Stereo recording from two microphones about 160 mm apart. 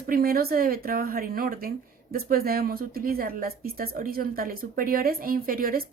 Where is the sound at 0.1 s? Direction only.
65° right (ahead or behind).